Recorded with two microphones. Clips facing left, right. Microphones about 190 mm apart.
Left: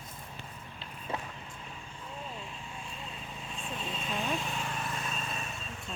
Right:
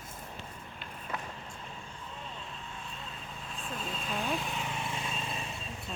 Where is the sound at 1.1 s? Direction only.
30° left (ahead or behind).